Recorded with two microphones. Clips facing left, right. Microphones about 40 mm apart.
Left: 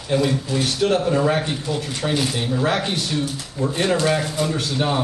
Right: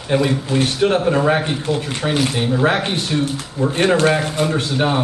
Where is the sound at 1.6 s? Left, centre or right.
Right.